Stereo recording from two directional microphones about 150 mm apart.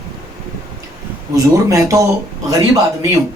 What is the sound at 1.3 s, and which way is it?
Speech, 20° right (ahead or behind).